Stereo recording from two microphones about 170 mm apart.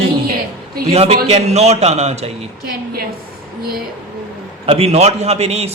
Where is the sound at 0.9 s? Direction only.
35° right (ahead or behind).